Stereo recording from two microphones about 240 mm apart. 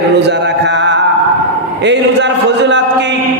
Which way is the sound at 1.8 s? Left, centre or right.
Right.